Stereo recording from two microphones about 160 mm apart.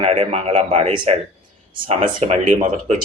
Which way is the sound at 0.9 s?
30° right (ahead or behind).